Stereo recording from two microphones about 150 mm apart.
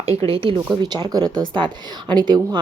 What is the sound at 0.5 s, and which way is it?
Speech, 25° right (ahead or behind).